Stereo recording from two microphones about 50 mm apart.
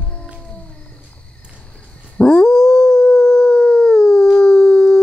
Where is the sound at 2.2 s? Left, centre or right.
Centre.